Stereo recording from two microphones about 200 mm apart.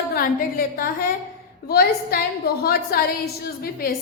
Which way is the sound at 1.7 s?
50° left (ahead or behind).